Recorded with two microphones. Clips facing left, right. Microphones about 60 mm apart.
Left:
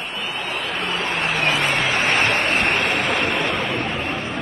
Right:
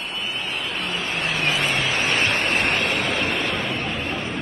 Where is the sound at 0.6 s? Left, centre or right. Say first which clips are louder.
Left 3 dB; left.